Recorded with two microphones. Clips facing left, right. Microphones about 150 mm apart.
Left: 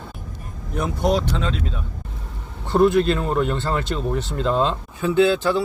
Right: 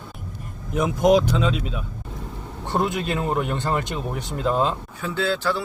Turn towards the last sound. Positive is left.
turn(degrees=20)  # may be behind; listen again after turning